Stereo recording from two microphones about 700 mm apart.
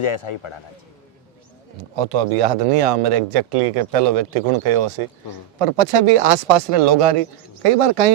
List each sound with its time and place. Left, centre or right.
0.0 s speech: left
1.8 s speech: right